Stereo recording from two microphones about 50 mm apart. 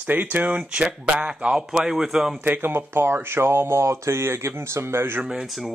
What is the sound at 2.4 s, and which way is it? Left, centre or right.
Speech, right.